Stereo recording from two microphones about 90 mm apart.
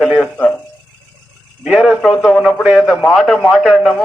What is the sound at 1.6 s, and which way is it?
Speech, 5° right (ahead or behind).